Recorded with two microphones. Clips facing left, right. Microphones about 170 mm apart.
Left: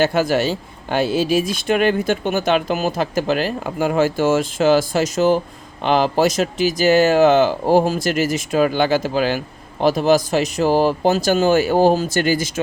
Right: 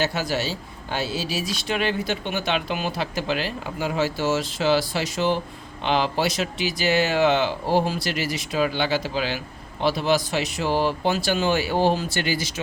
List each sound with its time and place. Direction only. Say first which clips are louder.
0.0 s speech: left 8 dB; 55° left (ahead or behind)